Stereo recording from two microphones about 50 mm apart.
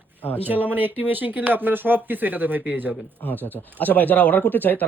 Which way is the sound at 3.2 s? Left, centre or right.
Left.